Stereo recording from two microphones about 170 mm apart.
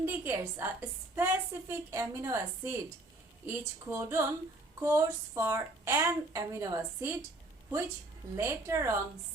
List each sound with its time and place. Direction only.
0.0 s a woman's voice: 15° right (ahead or behind)
8.4 s a woman's voice: 15° right (ahead or behind)